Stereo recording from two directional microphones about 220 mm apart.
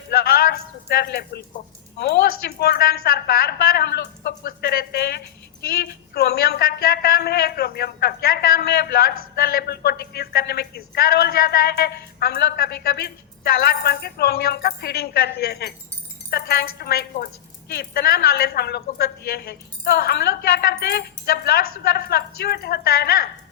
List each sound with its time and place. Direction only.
0.9 s speech: 45° left (ahead or behind)